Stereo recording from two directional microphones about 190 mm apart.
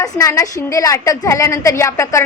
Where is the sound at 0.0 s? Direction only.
15° left (ahead or behind).